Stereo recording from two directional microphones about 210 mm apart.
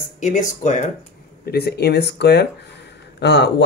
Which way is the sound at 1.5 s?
50° left (ahead or behind).